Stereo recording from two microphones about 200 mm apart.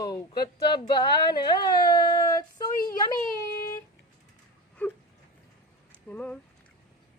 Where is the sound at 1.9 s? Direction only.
20° left (ahead or behind).